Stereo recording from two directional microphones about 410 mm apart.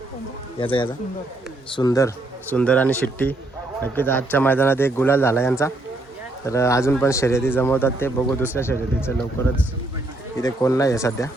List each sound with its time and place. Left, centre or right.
0.6 s speech: centre